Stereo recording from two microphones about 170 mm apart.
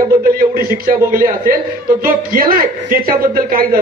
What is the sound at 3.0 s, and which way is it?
Speech, 60° right (ahead or behind).